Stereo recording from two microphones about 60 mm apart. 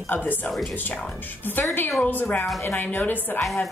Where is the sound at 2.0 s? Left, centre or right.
Left.